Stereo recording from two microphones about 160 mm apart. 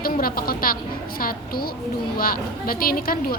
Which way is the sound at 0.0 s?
65° left (ahead or behind).